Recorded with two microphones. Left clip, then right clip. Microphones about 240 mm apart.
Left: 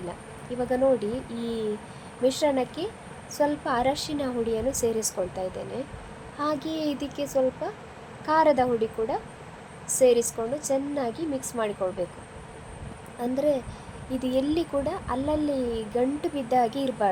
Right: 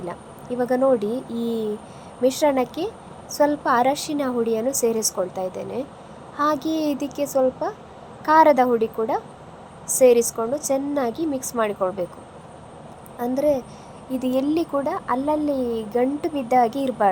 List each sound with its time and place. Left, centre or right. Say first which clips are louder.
0.6 s speech: right 4 dB; centre
13.1 s speech: right 4 dB; centre